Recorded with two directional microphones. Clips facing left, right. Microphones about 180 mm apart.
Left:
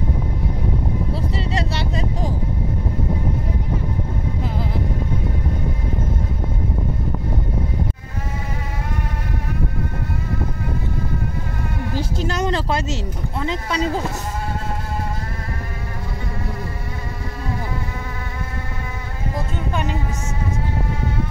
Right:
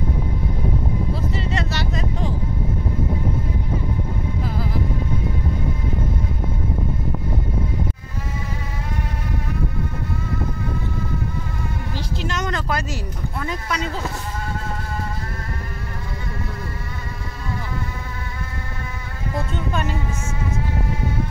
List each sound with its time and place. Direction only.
1.3 s a sound: 35° left (ahead or behind)
11.9 s speech: 35° left (ahead or behind)
19.7 s music: 15° left (ahead or behind)